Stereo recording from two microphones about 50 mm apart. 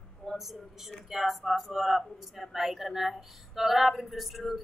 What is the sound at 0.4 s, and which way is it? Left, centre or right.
Speech, centre.